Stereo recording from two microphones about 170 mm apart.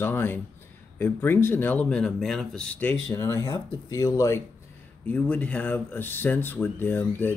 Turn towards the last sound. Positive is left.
turn(degrees=10)  # may be behind; listen again after turning